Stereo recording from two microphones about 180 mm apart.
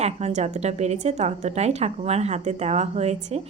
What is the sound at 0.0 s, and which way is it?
Speech, 35° right (ahead or behind).